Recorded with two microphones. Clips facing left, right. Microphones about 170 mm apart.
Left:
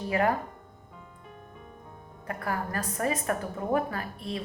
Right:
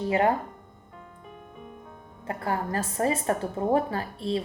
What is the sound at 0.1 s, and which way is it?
Speech, 25° right (ahead or behind).